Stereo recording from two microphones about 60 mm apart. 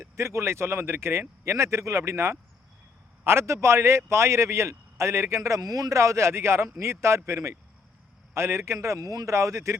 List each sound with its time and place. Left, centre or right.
0.0 s a man's voice: right
8.3 s a man's voice: right